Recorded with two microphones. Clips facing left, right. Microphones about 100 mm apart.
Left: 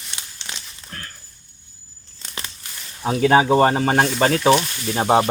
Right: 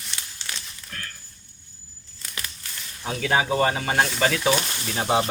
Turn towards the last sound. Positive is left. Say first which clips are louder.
# left 6 dB
turn(degrees=35)  # may be behind; listen again after turning